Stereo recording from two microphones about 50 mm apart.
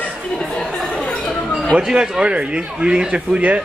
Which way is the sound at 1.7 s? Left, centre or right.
Centre.